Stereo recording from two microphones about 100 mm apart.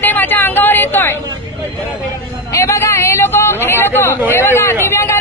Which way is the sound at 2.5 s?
30° left (ahead or behind).